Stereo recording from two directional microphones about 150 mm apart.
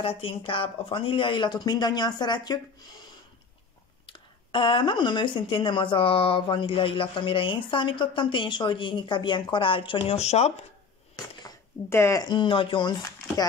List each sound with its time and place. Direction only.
0.0 s speech: 40° left (ahead or behind)
11.1 s speech: 20° left (ahead or behind)